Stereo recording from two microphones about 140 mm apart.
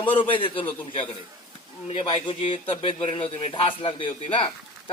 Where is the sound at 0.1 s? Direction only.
35° left (ahead or behind).